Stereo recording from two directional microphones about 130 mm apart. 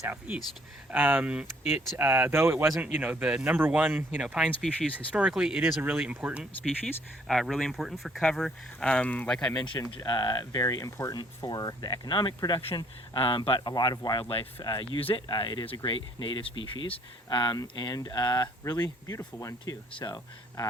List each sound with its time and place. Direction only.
0.0 s speech: 15° right (ahead or behind); by 9.6 s 5° left (ahead or behind)
9.6 s speech: 35° left (ahead or behind)
12.6 s speech: 45° left (ahead or behind)